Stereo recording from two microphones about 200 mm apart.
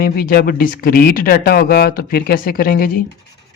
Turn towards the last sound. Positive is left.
turn(degrees=50)  # may be behind; listen again after turning